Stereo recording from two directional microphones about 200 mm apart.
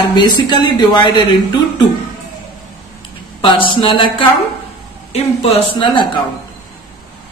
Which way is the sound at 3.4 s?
25° left (ahead or behind).